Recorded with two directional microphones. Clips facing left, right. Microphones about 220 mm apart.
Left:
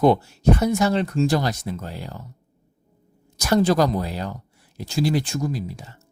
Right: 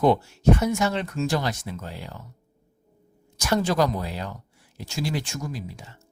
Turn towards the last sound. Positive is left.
turn(degrees=35)  # may be behind; listen again after turning